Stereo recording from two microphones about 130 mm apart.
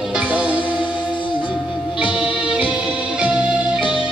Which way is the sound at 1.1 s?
40° left (ahead or behind).